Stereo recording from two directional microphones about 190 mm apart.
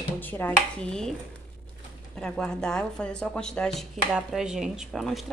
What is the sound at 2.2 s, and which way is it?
Speech, 5° left (ahead or behind).